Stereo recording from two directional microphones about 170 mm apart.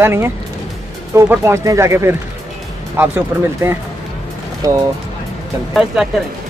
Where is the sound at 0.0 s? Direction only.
15° right (ahead or behind).